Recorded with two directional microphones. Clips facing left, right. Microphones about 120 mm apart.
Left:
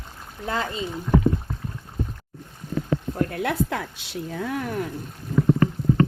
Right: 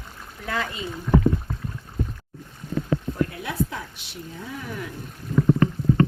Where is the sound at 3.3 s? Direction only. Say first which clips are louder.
Left 4 dB; 65° left (ahead or behind).